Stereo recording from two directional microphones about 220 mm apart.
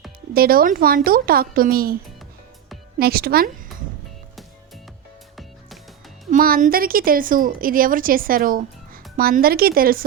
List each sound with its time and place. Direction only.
0.3 s a woman's voice: 40° right (ahead or behind)
3.0 s a woman's voice: 45° right (ahead or behind)
6.3 s a woman's voice: 40° right (ahead or behind)